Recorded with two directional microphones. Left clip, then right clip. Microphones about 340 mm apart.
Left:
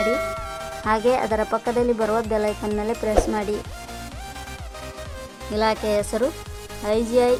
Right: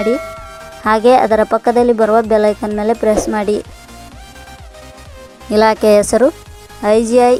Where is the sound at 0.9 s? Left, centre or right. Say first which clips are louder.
Right 11 dB; centre.